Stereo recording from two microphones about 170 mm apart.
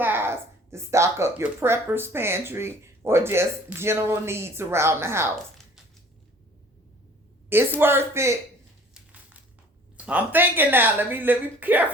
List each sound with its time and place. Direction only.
0.0 s speech: 10° right (ahead or behind)
7.8 s speech: 15° right (ahead or behind)
10.1 s speech: 10° right (ahead or behind)